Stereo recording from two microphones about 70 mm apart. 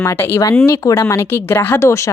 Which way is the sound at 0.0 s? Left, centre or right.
Left.